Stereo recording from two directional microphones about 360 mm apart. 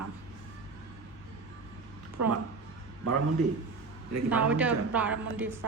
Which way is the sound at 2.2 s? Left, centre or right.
Right.